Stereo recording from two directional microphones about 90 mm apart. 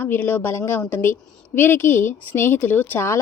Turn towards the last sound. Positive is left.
turn(degrees=30)  # may be behind; listen again after turning